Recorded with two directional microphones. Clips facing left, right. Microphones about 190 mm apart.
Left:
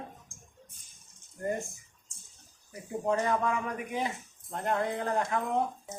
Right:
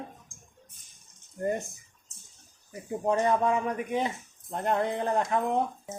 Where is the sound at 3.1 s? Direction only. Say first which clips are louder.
Right 4 dB; 25° right (ahead or behind).